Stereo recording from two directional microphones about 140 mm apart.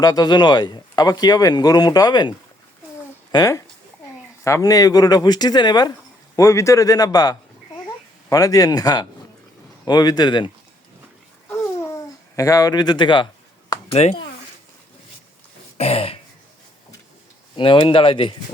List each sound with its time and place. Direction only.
0.0 s speech: 30° left (ahead or behind)
3.3 s speech: 25° left (ahead or behind)
11.4 s babbling: 20° left (ahead or behind); by 13.2 s 35° left (ahead or behind)
14.0 s speech: 50° left (ahead or behind)
15.8 s throat clearing: 45° left (ahead or behind)
17.6 s speech: 40° left (ahead or behind)